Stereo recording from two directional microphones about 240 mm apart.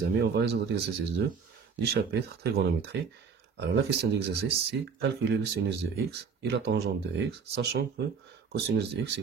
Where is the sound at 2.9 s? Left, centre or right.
Right.